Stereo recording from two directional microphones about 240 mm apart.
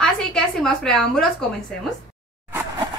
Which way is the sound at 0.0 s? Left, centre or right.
Centre.